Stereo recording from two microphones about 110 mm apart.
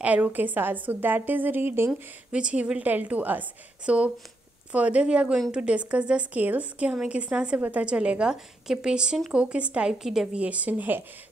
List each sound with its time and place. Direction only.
0.0 s a woman's voice: 15° right (ahead or behind)
1.9 s a woman's voice: 10° right (ahead or behind)